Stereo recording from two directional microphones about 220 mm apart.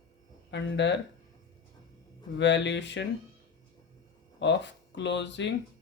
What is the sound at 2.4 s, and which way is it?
Speech, 55° left (ahead or behind).